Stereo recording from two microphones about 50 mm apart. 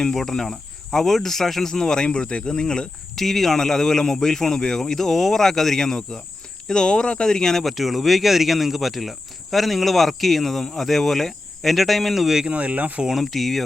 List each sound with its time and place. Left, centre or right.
0.0 s speech: centre
3.2 s speech: centre
12.5 s speech: right
13.1 s speech: centre